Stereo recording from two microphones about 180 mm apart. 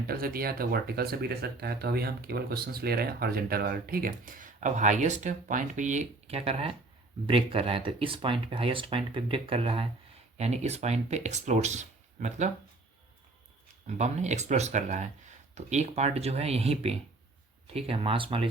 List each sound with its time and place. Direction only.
0.1 s speech: 55° right (ahead or behind); by 12.5 s 40° right (ahead or behind)
13.8 s speech: 40° right (ahead or behind)